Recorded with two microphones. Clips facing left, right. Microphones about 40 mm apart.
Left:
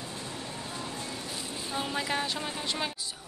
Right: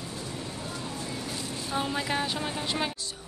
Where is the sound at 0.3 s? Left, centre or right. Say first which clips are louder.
Right 2 dB; left.